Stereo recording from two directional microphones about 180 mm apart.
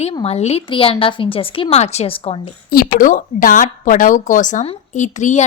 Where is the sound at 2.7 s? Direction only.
55° left (ahead or behind).